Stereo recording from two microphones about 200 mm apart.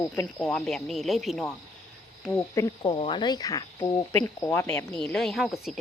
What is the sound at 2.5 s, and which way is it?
A woman's voice, 20° left (ahead or behind).